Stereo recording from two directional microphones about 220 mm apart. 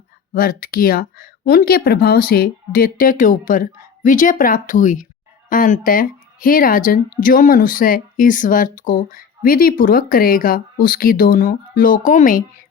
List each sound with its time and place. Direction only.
0.3 s speech: 40° left (ahead or behind)